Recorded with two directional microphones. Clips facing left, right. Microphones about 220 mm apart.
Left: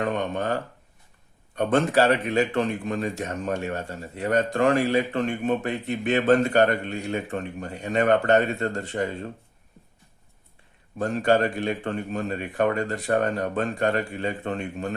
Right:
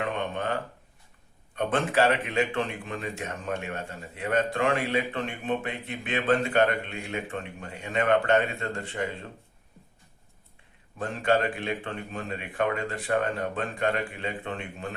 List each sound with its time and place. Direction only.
0.0 s a man's voice: 40° left (ahead or behind)
10.9 s a man's voice: 40° left (ahead or behind)